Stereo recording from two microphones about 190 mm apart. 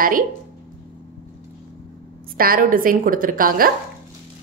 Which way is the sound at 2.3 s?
50° right (ahead or behind).